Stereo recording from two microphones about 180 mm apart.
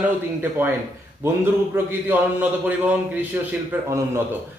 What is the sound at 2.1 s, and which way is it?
A man's voice, 10° right (ahead or behind).